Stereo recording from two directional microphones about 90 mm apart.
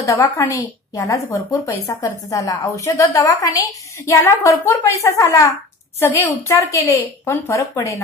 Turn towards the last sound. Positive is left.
turn(degrees=35)  # may be behind; listen again after turning